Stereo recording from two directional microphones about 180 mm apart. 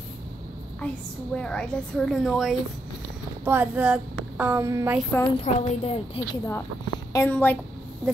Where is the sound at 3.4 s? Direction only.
10° right (ahead or behind).